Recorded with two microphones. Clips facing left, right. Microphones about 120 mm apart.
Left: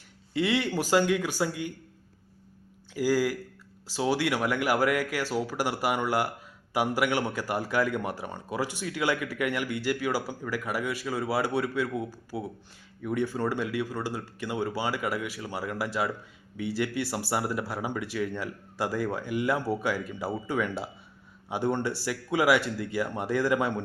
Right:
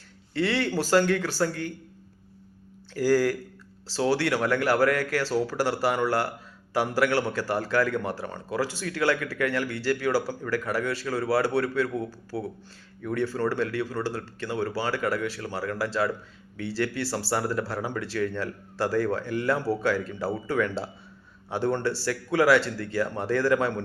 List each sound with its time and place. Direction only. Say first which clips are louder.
0.3 s a man's voice: right 1 dB; 15° left (ahead or behind)
2.9 s a man's voice: right 3 dB; 10° left (ahead or behind)